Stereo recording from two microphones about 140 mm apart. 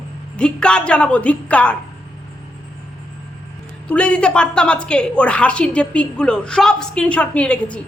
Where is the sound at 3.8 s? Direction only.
10° left (ahead or behind).